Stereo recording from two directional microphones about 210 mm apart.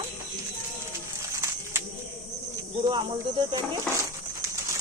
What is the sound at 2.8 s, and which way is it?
Speech, 20° right (ahead or behind).